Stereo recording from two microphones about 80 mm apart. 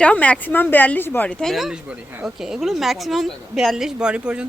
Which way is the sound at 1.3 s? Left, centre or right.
Centre.